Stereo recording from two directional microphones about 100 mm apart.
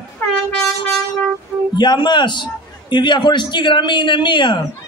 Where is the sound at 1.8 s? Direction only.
50° left (ahead or behind).